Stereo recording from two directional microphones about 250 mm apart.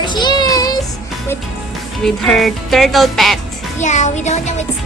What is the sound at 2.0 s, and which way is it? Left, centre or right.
Speech, centre.